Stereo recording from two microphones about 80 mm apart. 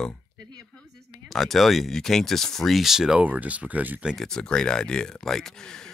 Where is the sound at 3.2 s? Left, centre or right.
Centre.